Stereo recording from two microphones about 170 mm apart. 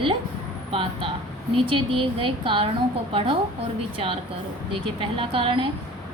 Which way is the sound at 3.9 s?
35° right (ahead or behind).